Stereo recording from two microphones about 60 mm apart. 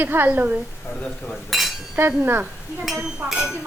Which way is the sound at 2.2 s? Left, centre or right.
Right.